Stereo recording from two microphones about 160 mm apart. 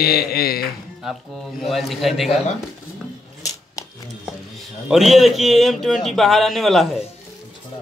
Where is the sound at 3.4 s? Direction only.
20° left (ahead or behind).